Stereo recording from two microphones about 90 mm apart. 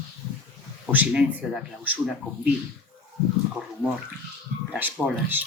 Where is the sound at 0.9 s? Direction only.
20° right (ahead or behind).